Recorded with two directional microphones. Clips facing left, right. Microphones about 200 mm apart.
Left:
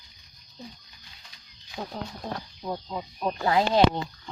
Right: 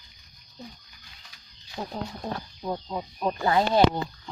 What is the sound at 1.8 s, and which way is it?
Speech, centre (ahead or behind).